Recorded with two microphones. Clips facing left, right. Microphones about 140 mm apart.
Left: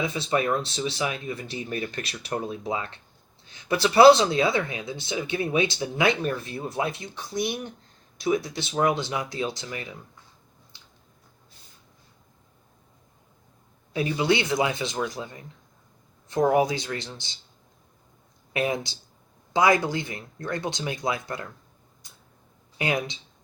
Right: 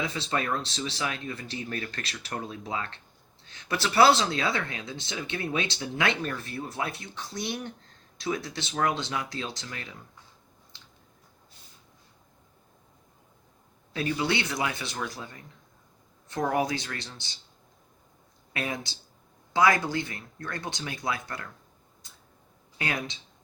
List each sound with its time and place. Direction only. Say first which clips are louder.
0.0 s speech: left 5 dB; 15° left (ahead or behind)
13.9 s speech: left 4 dB; 15° left (ahead or behind)
16.5 s speech: left 4 dB; 15° left (ahead or behind)
18.5 s speech: left 7 dB; 20° left (ahead or behind)
22.8 s speech: left 5 dB; 15° left (ahead or behind)